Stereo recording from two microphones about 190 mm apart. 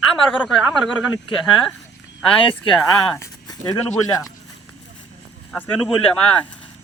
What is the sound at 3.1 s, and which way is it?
Speech, 15° left (ahead or behind).